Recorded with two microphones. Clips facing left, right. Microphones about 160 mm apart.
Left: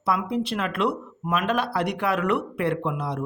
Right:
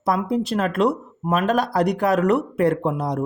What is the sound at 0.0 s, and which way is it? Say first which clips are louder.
Speech: right 3 dB; 40° right (ahead or behind).